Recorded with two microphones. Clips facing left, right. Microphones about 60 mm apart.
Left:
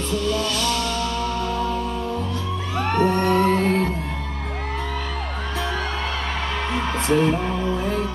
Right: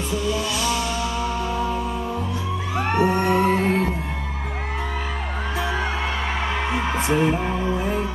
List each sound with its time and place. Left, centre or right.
0.1 s music: centre
2.8 s music: centre
6.7 s music: centre